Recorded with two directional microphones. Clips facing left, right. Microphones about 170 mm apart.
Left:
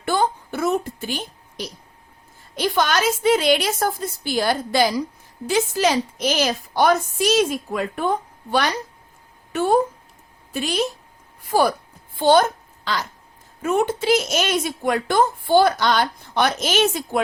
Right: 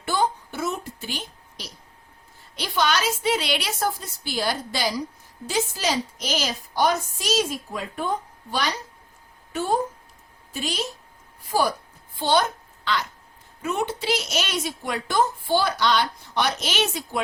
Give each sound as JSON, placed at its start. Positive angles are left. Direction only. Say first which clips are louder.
{"t": 0.0, "sound": "a sound", "louder": "left 3 dB", "side_deg": 55}
{"t": 2.6, "sound": "a woman's voice", "louder": "left 4 dB", "side_deg": 50}
{"t": 11.5, "sound": "a woman's voice", "louder": "left 5 dB", "side_deg": 60}
{"t": 12.2, "sound": "a child's voice", "louder": "left 6 dB", "side_deg": 50}